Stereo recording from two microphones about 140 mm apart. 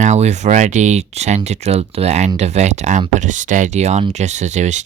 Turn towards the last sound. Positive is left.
turn(degrees=-55)  # may be behind; listen again after turning